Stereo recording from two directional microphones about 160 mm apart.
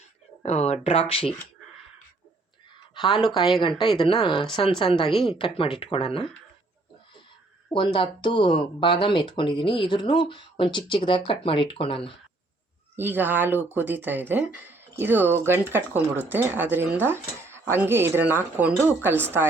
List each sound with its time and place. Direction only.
0.4 s speech: 40° left (ahead or behind)
2.9 s a sound: 30° left (ahead or behind)
3.6 s speech: 30° left (ahead or behind)
7.7 s speech: 35° left (ahead or behind)
13.0 s speech: 10° right (ahead or behind)